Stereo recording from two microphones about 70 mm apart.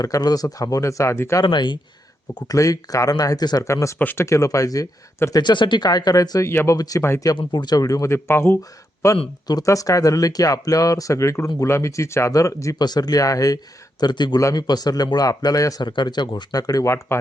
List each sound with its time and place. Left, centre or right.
0.0 s speech: left
1.4 s speech: left
2.6 s speech: left
3.6 s speech: left
3.9 s speech: left
4.2 s speech: left
5.3 s speech: left
6.4 s speech: left
6.7 s speech: left
7.2 s speech: left
12.8 s speech: left
14.0 s speech: left
14.5 s speech: left
16.8 s speech: left